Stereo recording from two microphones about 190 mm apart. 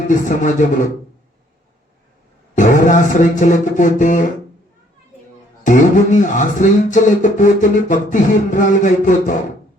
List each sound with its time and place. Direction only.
0.1 s speech: 45° left (ahead or behind)
2.6 s speech: 40° left (ahead or behind)
5.6 s speech: 40° left (ahead or behind)